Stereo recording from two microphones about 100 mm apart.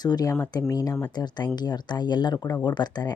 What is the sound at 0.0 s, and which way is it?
Speech, 40° left (ahead or behind).